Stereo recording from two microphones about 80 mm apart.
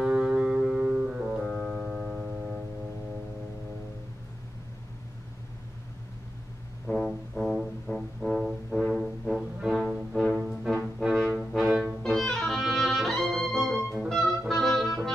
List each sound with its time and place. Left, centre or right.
0.0 s music: centre
6.9 s music: left
7.3 s music: centre